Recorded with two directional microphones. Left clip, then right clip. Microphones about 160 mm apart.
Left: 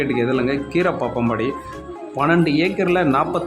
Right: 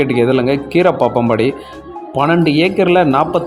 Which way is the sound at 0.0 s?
25° right (ahead or behind).